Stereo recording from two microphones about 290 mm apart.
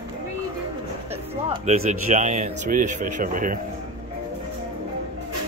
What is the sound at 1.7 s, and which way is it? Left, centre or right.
Speech, right.